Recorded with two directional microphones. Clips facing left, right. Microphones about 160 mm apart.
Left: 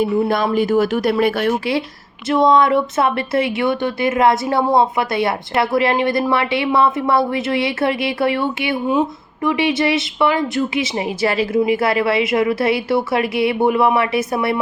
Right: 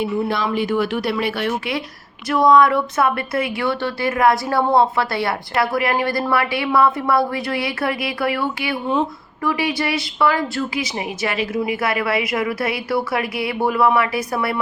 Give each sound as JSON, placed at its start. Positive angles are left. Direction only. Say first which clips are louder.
{"t": 0.0, "sound": "speech", "louder": "left 4 dB", "side_deg": 45}
{"t": 2.3, "sound": "speech", "louder": "left 1 dB", "side_deg": 25}